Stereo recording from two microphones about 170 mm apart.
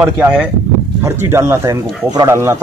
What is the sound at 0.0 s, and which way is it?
Speech, 5° right (ahead or behind).